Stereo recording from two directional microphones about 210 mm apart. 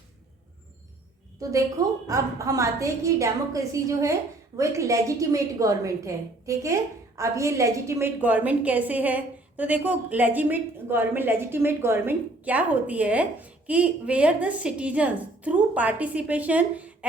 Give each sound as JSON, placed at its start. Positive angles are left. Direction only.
{"t": 1.4, "sound": "a woman's voice", "side_deg": -15}